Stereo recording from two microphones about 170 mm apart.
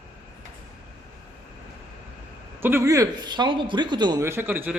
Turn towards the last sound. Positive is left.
turn(degrees=-10)  # may be behind; listen again after turning